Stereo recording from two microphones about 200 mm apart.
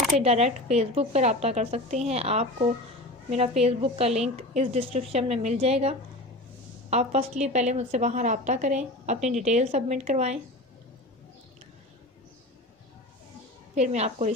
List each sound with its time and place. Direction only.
0.2 s a woman's voice: 30° right (ahead or behind)
13.7 s a woman's voice: 35° right (ahead or behind)